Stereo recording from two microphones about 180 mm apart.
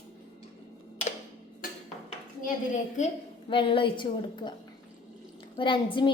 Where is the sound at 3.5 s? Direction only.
30° left (ahead or behind).